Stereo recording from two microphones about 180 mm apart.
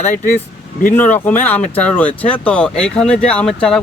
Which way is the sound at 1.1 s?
10° left (ahead or behind).